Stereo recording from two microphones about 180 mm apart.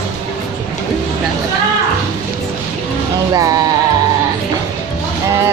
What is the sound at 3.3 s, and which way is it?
Music, 20° right (ahead or behind).